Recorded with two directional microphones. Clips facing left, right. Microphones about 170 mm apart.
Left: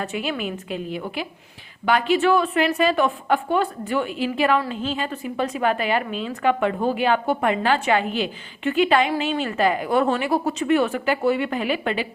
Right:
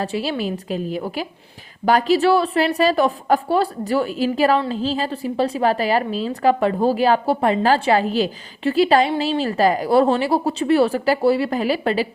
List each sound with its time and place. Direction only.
0.0 s a woman's voice: 30° right (ahead or behind)